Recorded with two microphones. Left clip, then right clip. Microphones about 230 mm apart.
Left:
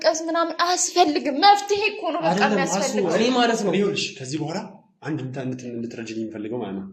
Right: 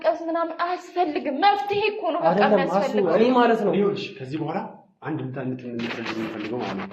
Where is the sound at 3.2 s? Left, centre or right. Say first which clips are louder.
Right 2 dB; left.